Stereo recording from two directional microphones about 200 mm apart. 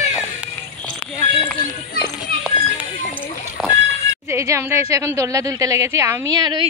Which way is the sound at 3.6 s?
Centre (ahead or behind).